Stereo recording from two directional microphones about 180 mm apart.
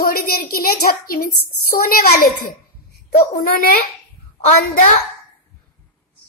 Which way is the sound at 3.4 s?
50° left (ahead or behind).